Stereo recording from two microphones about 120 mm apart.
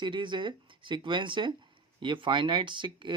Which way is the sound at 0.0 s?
40° right (ahead or behind).